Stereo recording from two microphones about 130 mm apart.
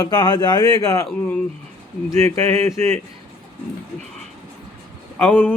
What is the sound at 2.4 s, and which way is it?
Speech, 20° left (ahead or behind).